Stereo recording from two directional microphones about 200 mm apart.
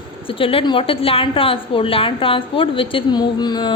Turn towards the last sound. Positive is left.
turn(degrees=20)  # may be behind; listen again after turning